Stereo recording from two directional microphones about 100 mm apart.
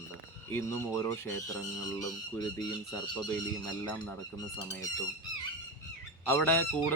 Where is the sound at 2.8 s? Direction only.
5° left (ahead or behind).